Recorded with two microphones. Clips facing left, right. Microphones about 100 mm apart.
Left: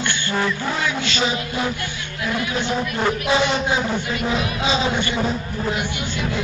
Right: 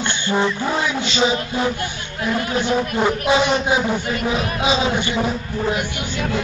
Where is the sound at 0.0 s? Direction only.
20° right (ahead or behind).